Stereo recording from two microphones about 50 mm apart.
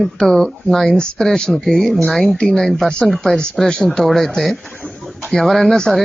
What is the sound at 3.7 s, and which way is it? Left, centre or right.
Speech, centre.